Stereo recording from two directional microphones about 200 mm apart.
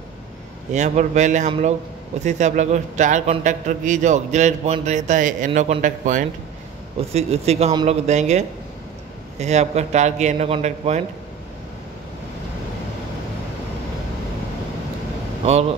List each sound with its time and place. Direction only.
0.7 s a man's voice: 35° right (ahead or behind)